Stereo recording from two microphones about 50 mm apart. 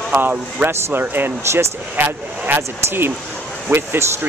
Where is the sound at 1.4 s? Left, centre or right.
Right.